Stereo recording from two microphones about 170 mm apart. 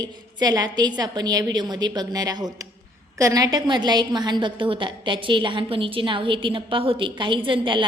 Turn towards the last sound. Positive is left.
turn(degrees=-30)  # may be behind; listen again after turning